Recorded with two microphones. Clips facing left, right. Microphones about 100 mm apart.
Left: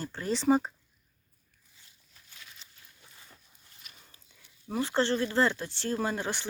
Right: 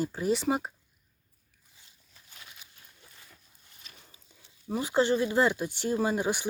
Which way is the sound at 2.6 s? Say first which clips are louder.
Right 1 dB; 10° right (ahead or behind).